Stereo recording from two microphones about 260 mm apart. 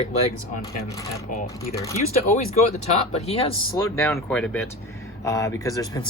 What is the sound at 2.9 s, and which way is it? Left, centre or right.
Speech, left.